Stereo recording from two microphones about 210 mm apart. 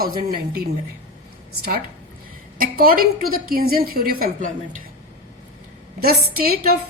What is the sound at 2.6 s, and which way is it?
A woman's voice, 45° right (ahead or behind).